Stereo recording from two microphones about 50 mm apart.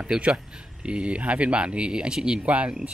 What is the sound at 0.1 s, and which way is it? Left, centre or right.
Speech, centre.